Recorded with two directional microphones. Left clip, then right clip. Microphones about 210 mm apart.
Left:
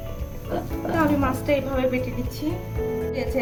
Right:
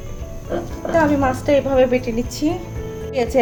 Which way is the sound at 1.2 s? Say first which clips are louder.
Right 6 dB; 20° right (ahead or behind).